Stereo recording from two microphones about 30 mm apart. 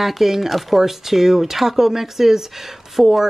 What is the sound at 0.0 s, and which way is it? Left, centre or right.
Speech, centre.